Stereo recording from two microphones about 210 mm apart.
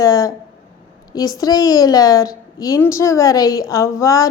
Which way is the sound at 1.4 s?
20° left (ahead or behind).